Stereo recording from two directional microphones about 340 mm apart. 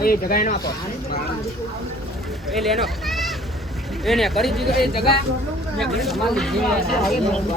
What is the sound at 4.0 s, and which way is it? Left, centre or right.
Speech, centre.